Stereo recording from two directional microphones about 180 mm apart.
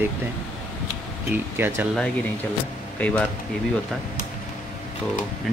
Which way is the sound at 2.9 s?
10° left (ahead or behind).